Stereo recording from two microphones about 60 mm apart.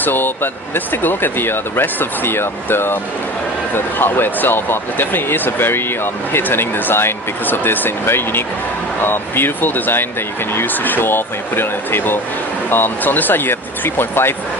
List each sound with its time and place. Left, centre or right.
0.0 s speech: left